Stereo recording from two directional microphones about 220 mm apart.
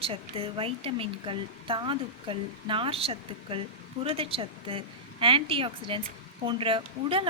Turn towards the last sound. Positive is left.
turn(degrees=-25)  # may be behind; listen again after turning